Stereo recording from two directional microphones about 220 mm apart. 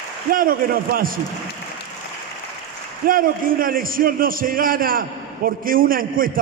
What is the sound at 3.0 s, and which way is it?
A man's voice, 40° right (ahead or behind).